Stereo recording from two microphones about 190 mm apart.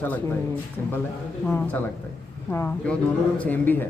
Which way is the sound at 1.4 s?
10° left (ahead or behind).